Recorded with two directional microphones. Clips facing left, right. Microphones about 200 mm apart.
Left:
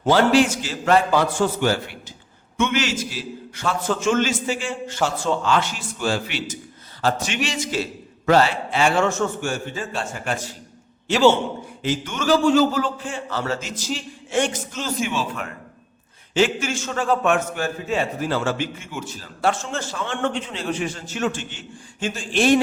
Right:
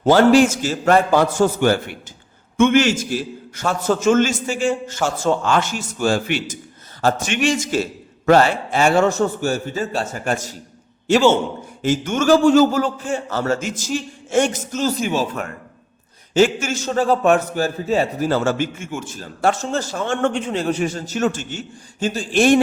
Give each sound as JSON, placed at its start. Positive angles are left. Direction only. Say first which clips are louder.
{"t": 0.0, "sound": "a man's voice", "louder": "right 4 dB", "side_deg": -45}
{"t": 11.8, "sound": "a man's voice", "louder": "right 6 dB", "side_deg": -45}